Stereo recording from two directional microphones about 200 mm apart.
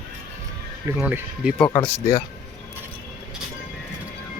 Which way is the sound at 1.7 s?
10° left (ahead or behind).